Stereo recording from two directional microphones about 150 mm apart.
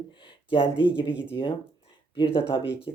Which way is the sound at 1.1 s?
10° right (ahead or behind).